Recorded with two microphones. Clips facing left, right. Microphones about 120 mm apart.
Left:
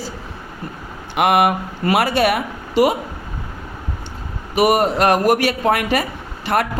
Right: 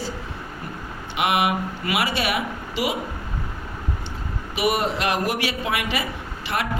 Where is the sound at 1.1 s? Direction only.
50° left (ahead or behind).